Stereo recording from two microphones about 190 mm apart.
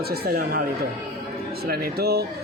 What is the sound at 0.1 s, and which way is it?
Speech, 50° right (ahead or behind).